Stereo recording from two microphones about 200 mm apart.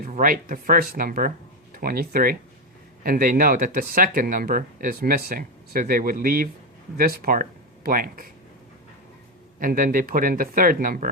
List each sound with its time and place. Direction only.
0.0 s speech: 45° right (ahead or behind)
9.6 s speech: 45° right (ahead or behind)